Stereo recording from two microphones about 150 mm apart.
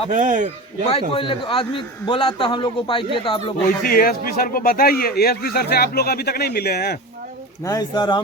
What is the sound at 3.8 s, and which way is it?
Speech, 80° left.